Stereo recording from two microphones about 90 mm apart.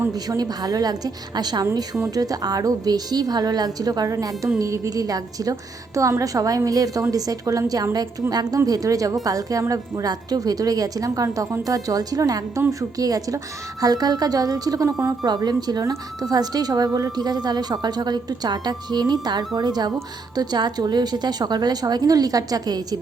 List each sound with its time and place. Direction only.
0.1 s a woman's voice: 45° right (ahead or behind)